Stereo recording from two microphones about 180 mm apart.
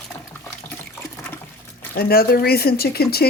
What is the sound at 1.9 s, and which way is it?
Speech, 55° left (ahead or behind).